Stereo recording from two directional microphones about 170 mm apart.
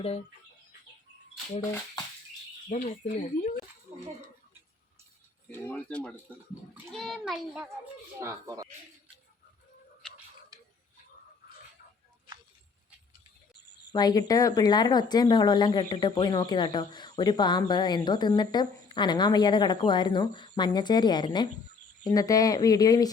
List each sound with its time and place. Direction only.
0.0 s speech: 40° left (ahead or behind)
2.6 s speech: 40° left (ahead or behind)
5.5 s a child's voice: 10° left (ahead or behind)
8.2 s speech: 20° right (ahead or behind)
13.9 s speech: 25° left (ahead or behind)